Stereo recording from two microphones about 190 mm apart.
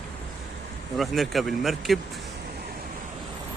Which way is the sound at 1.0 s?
Centre (ahead or behind).